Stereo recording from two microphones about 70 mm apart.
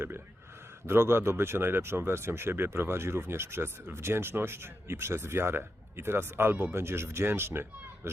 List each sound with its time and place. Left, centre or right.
0.9 s speech: right